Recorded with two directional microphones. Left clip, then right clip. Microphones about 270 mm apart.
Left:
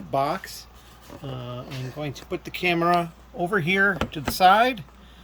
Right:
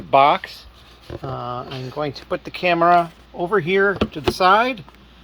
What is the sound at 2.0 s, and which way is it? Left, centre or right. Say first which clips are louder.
Speech: right 9 dB; right.